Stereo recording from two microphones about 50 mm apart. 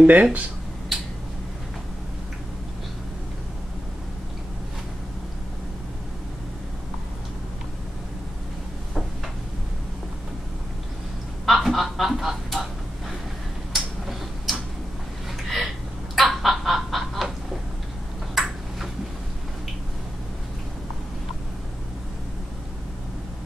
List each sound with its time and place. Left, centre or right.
0.0 s speech: right
11.4 s a sound: centre
13.7 s tick-tock: centre
15.4 s a sound: centre
16.2 s chicken: centre
18.3 s ping: centre